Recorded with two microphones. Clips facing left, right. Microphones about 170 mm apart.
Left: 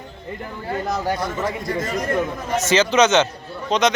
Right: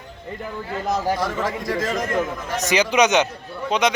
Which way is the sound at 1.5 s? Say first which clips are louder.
Right 1 dB; 90° right.